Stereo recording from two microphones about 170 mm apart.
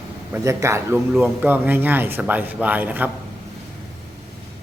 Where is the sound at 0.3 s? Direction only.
15° right (ahead or behind).